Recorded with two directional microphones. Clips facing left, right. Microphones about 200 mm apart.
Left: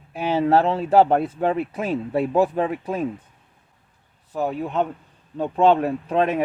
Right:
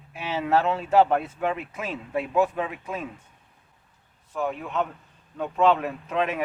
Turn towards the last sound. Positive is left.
turn(degrees=35)  # may be behind; listen again after turning